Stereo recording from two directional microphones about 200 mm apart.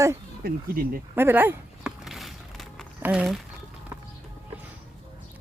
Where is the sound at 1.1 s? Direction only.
10° right (ahead or behind).